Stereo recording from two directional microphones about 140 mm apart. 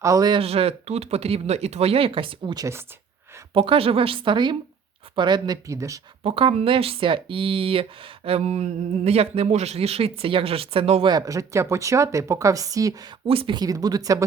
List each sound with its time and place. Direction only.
0.0 s a woman's voice: 25° right (ahead or behind)
6.2 s speech: 45° right (ahead or behind)
11.1 s a woman's voice: 25° right (ahead or behind)
13.2 s a woman's voice: 40° right (ahead or behind); by 14.3 s 25° right (ahead or behind)